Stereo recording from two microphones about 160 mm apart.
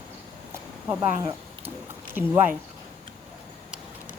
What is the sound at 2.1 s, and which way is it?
Speech, 10° right (ahead or behind).